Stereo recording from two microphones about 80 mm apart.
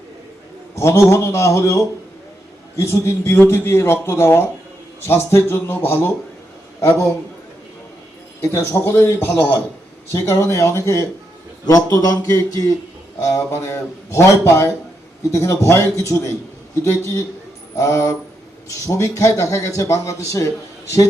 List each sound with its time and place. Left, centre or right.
0.8 s speech: left
8.4 s speech: left